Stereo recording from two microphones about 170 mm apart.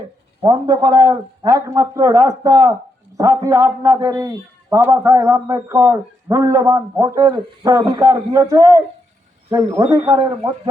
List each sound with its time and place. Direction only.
0.4 s a man's voice: 20° right (ahead or behind)